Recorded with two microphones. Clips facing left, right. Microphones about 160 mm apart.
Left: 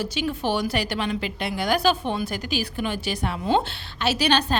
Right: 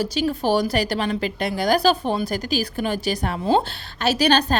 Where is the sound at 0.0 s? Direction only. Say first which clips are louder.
Right 4 dB; 40° right (ahead or behind).